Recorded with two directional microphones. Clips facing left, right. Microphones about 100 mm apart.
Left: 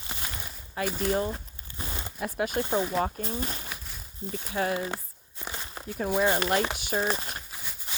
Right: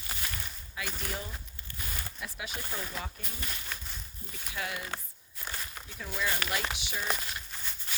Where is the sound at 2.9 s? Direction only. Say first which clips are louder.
Left 13 dB; 35° left (ahead or behind).